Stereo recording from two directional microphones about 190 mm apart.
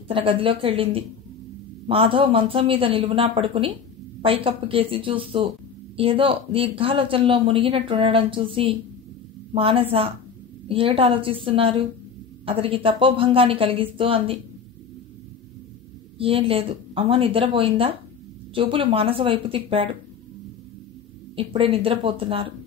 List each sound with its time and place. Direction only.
0.1 s speech: 30° right (ahead or behind)
16.2 s speech: 30° right (ahead or behind)
21.4 s speech: 30° right (ahead or behind)